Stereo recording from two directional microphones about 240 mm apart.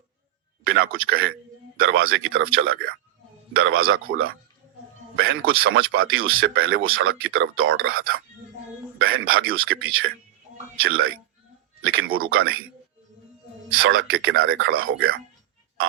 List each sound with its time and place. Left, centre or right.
0.6 s a sound: right
0.9 s speech: right
5.1 s speech: right
13.7 s speech: right